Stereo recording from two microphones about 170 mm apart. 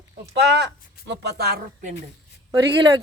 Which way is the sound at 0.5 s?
90° right.